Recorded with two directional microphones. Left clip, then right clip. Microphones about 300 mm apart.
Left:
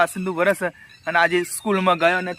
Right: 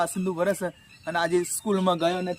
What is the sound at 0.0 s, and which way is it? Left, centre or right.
A man's voice, centre.